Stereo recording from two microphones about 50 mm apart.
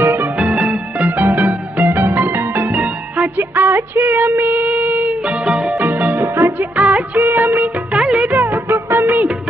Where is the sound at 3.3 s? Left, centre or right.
Right.